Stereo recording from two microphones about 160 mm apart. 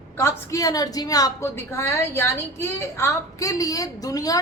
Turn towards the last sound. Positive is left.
turn(degrees=20)  # may be behind; listen again after turning